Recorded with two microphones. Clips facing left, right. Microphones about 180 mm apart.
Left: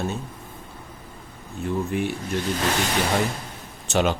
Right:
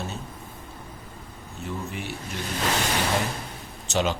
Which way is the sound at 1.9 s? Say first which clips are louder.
Left 9 dB; 55° left (ahead or behind).